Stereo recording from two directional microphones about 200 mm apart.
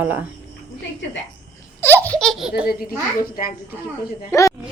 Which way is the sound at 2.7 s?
50° left (ahead or behind).